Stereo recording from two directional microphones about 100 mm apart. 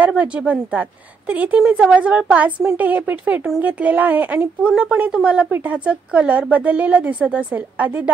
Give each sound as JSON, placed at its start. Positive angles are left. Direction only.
{"t": 0.0, "sound": "speech", "side_deg": -15}